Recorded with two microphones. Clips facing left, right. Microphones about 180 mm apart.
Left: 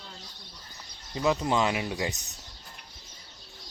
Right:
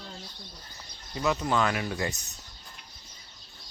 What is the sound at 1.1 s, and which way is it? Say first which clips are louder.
Speech: left 1 dB; 20° left (ahead or behind).